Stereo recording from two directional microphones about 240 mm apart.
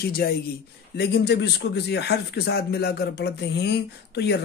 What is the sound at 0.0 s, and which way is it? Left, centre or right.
Speech, left.